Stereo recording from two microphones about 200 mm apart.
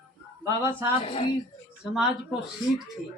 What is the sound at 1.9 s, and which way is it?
Speech, 5° right (ahead or behind).